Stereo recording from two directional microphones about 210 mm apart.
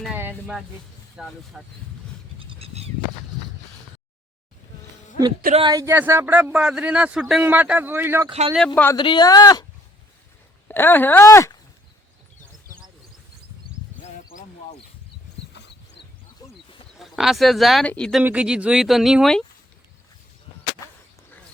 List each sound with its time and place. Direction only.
0.0 s speech: 5° right (ahead or behind)
2.4 s a sound: 25° right (ahead or behind)
5.5 s speech: 20° right (ahead or behind)
8.3 s speech: 25° right (ahead or behind)
8.5 s speech: 5° left (ahead or behind)
9.0 s speech: 20° left (ahead or behind)
10.7 s speech: 10° left (ahead or behind)
14.0 s a sound: 35° left (ahead or behind)
15.5 s a sound: 55° left (ahead or behind)
17.0 s speech: centre (ahead or behind)
18.2 s speech: 5° right (ahead or behind)